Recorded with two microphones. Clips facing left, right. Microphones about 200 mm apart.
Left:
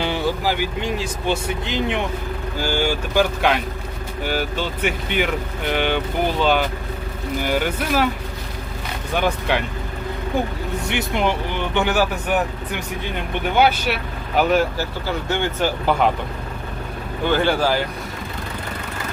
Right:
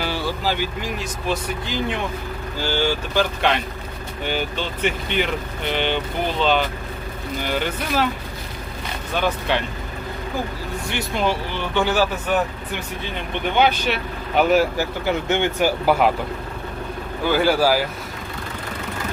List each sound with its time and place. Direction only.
0.0 s vehicle: 20° left (ahead or behind)
0.8 s speech: 25° left (ahead or behind); by 8.0 s 10° left (ahead or behind)
9.1 s speech: 10° left (ahead or behind)
10.8 s speech: 20° left (ahead or behind)
13.6 s speech: 10° left (ahead or behind)
14.8 s speech: 20° right (ahead or behind)
17.3 s speech: 5° right (ahead or behind)